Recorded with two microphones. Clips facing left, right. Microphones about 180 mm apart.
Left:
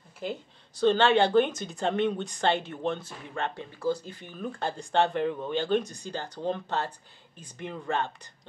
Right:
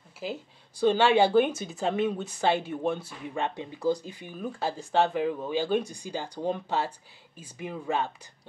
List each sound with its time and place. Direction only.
0.2 s speech: 10° right (ahead or behind)